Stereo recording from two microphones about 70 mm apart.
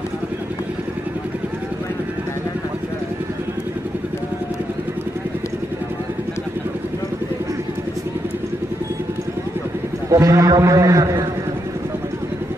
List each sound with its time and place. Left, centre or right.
10.1 s a man's voice: right